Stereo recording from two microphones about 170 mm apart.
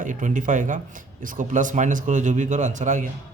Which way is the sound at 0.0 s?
45° right (ahead or behind).